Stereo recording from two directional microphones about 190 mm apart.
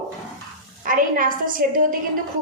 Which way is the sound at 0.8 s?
45° right (ahead or behind).